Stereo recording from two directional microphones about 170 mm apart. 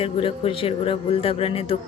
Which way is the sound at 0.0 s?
35° left (ahead or behind).